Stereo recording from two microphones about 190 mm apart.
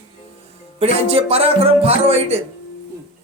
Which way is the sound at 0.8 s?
30° right (ahead or behind).